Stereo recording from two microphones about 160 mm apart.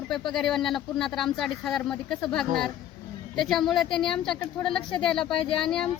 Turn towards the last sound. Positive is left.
turn(degrees=35)  # may be behind; listen again after turning